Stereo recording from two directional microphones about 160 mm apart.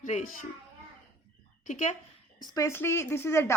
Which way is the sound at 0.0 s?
50° left (ahead or behind).